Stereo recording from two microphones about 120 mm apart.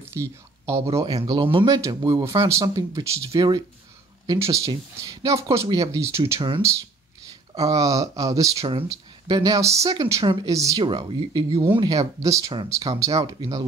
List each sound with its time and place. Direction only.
0.0 s speech: 25° right (ahead or behind)
1.2 s speech: 40° right (ahead or behind)
1.7 s speech: 30° right (ahead or behind)
7.5 s speech: 30° right (ahead or behind)
8.5 s speech: 50° right (ahead or behind)
8.8 s speech: 30° right (ahead or behind)
10.8 s speech: 45° right (ahead or behind)
11.9 s speech: 25° right (ahead or behind)